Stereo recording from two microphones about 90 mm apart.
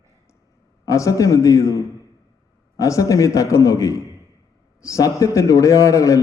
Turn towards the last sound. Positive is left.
turn(degrees=35)  # may be behind; listen again after turning